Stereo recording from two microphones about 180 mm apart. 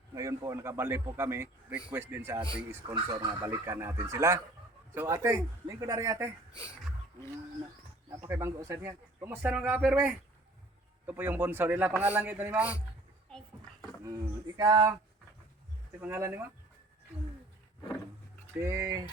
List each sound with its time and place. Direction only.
0.1 s speech: 20° right (ahead or behind)
2.8 s speech: 25° right (ahead or behind)
3.4 s speech: 10° right (ahead or behind)
8.1 s speech: 15° right (ahead or behind)
14.0 s speech: 20° right (ahead or behind)
16.0 s speech: 10° right (ahead or behind)
18.6 s speech: 15° right (ahead or behind)